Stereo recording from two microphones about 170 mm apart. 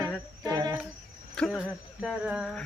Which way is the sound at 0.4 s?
25° right (ahead or behind).